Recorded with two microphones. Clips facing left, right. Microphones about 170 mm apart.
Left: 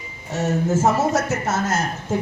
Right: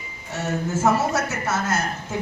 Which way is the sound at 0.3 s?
45° left (ahead or behind).